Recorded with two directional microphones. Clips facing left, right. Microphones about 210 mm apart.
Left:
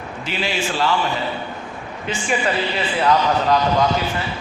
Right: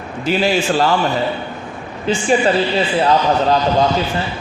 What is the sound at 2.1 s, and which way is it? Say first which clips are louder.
A man's voice: right 7 dB; 30° right (ahead or behind).